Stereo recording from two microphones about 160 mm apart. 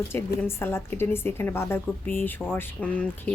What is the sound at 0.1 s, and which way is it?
Speech, 15° left (ahead or behind).